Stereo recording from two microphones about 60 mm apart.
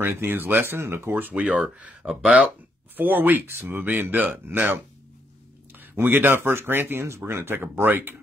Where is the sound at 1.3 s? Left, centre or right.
Right.